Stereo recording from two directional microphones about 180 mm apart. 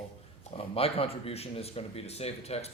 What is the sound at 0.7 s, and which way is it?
Speech, 30° left (ahead or behind).